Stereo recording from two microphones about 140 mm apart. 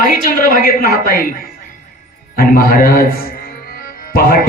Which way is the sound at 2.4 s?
90° left.